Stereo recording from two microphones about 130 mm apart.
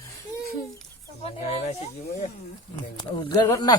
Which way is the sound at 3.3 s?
30° left (ahead or behind).